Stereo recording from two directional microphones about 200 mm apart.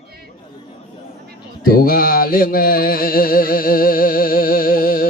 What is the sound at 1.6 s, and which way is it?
Music, 45° left (ahead or behind).